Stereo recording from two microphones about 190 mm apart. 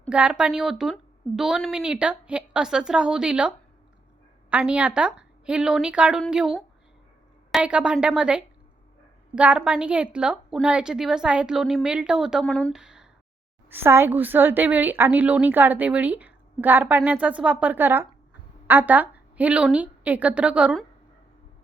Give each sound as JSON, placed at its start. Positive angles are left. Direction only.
{"t": 0.1, "sound": "a woman's voice", "side_deg": -5}